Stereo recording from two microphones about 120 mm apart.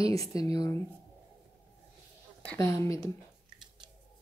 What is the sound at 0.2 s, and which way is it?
Speech, 30° left (ahead or behind).